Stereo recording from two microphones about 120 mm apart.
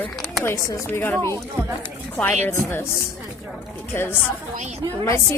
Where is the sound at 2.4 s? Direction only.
20° left (ahead or behind).